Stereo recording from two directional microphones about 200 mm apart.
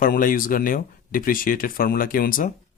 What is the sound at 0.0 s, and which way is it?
Speech, 45° left (ahead or behind).